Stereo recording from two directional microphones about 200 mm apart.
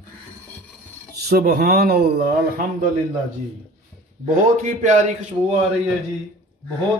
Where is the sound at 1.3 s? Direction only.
50° right (ahead or behind).